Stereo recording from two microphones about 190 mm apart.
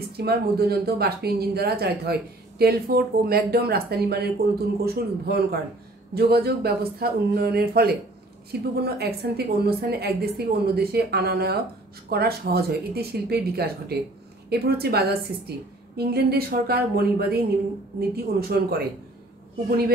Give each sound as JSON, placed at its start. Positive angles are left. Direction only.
{"t": 0.2, "sound": "a woman's voice", "side_deg": -55}